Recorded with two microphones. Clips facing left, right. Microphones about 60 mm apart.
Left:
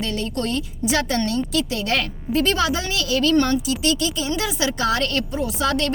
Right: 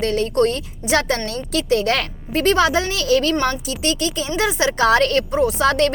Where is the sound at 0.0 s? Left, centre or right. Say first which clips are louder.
Right 8 dB; right.